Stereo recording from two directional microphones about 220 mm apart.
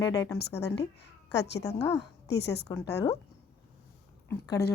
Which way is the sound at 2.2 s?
50° left (ahead or behind).